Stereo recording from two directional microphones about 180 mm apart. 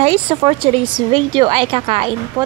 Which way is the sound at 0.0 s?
30° right (ahead or behind).